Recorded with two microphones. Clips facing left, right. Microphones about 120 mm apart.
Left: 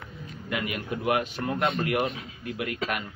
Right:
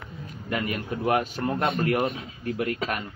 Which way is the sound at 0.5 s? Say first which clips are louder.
Right 2 dB; 40° right (ahead or behind).